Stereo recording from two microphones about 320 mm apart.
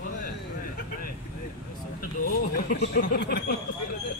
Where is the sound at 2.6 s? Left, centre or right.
Left.